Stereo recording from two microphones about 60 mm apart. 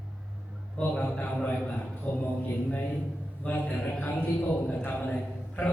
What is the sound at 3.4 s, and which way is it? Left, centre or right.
A man's voice, left.